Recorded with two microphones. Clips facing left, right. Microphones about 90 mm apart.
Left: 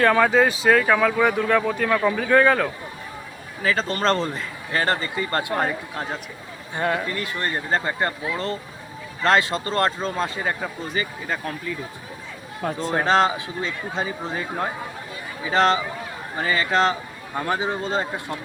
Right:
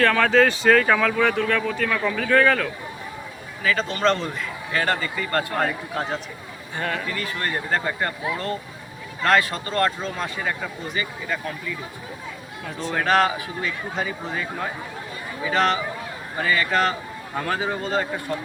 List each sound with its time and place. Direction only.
0.0 s speech: 15° left (ahead or behind)
3.6 s a man's voice: 35° left (ahead or behind)
6.7 s a man's voice: 20° left (ahead or behind)
12.6 s a man's voice: 35° left (ahead or behind)
13.1 s speech: 25° left (ahead or behind)